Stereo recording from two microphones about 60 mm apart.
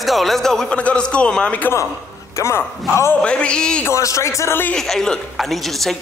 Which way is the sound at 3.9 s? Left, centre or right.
Left.